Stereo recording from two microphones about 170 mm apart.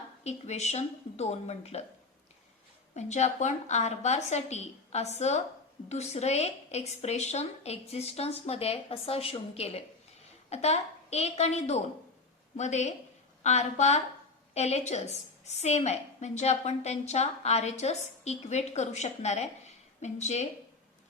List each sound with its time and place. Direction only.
0.3 s a woman's voice: 40° left (ahead or behind)
2.9 s a woman's voice: 45° left (ahead or behind)